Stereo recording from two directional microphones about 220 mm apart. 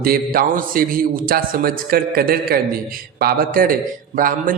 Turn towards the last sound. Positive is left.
turn(degrees=-40)  # may be behind; listen again after turning